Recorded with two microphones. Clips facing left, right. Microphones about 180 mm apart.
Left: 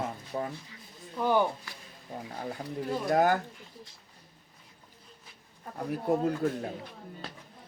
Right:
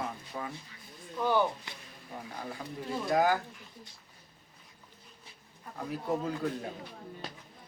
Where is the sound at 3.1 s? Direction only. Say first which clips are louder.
Left 2 dB; 55° left (ahead or behind).